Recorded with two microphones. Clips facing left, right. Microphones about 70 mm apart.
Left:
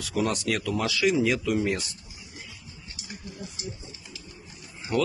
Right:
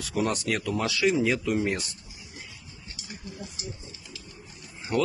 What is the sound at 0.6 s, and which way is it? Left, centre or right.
Speech, centre.